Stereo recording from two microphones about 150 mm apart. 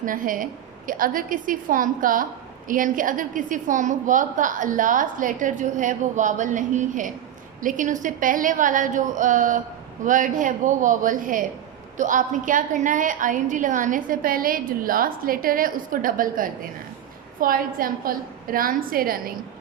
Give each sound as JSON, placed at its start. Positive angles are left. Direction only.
{"t": 0.0, "sound": "a woman's voice", "side_deg": -65}